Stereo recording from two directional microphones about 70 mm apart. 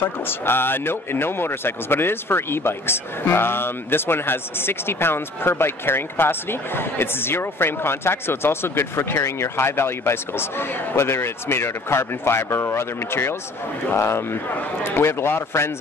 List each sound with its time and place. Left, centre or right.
0.0 s speech: left